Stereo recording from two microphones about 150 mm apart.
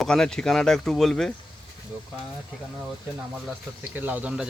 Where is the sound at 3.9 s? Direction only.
10° right (ahead or behind).